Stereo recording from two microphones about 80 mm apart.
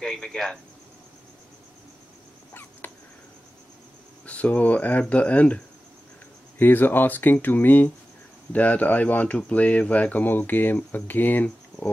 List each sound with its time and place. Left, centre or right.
0.0 s speech: centre
4.3 s speech: centre
6.6 s speech: left